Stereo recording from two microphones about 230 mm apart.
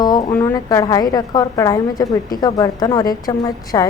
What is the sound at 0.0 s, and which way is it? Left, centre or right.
A woman's voice, centre.